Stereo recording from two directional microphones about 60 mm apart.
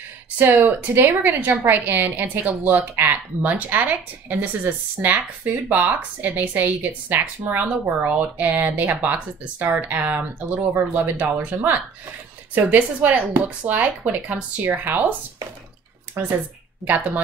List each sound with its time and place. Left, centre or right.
0.4 s a woman's voice: right
8.0 s speech: right
16.2 s a woman's voice: right